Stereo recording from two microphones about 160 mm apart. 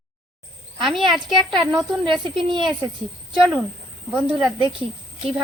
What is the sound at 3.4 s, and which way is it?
Speech, centre (ahead or behind).